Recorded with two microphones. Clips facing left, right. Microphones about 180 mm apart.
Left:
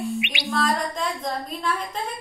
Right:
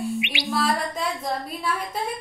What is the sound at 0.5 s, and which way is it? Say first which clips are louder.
A woman's voice: even; 10° right (ahead or behind).